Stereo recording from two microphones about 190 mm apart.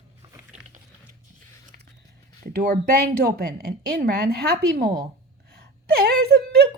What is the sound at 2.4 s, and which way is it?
A woman's voice, 55° right (ahead or behind).